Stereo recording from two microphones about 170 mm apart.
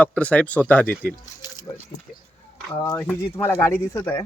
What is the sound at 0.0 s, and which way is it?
Speech, 5° left (ahead or behind).